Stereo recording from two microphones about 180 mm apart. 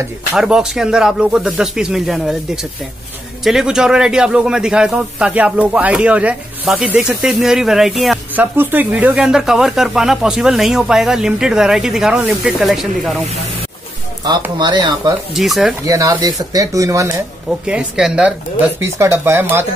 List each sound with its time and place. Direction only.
0.3 s a man's voice: 5° right (ahead or behind)
14.6 s speech: 25° right (ahead or behind)
15.3 s a man's voice: centre (ahead or behind)
15.9 s speech: 20° right (ahead or behind)
17.5 s a man's voice: 5° right (ahead or behind)